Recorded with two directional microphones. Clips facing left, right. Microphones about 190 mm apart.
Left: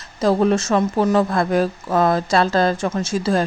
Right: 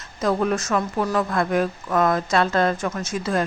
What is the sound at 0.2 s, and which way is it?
Speech, 30° left (ahead or behind).